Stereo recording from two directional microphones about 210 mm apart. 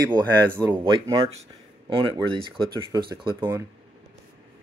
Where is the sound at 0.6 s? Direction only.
20° right (ahead or behind).